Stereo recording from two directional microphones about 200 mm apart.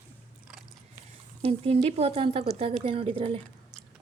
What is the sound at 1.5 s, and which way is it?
Speech, 30° right (ahead or behind).